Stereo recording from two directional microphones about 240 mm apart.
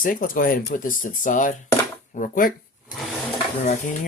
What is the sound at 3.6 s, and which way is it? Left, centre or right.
Speech, left.